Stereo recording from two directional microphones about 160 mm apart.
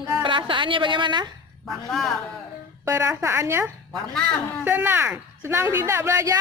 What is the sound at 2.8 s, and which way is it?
Speech, 20° right (ahead or behind).